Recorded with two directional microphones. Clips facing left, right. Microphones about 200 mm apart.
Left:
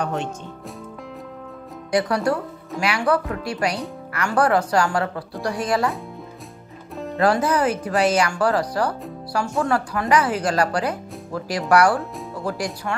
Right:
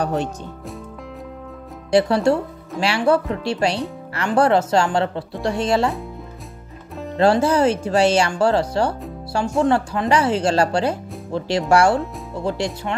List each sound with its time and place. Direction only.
0.0 s speech: 35° right (ahead or behind)
1.9 s speech: 30° right (ahead or behind)
7.2 s speech: 25° right (ahead or behind)